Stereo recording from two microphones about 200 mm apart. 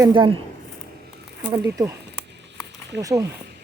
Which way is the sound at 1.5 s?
15° right (ahead or behind).